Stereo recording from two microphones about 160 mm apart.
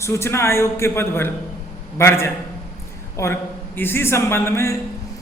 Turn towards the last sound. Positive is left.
turn(degrees=15)  # may be behind; listen again after turning